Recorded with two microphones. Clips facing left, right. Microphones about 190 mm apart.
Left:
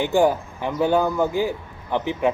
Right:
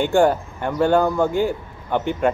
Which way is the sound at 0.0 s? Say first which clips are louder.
Right 2 dB; 5° left (ahead or behind).